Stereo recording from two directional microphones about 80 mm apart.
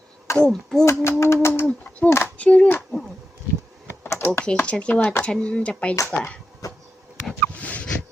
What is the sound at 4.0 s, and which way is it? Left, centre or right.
Computer keyboard, left.